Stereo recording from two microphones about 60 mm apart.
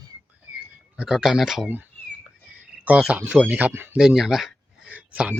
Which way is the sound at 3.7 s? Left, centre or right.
Right.